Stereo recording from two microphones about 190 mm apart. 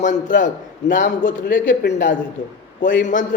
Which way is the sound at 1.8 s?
65° left (ahead or behind).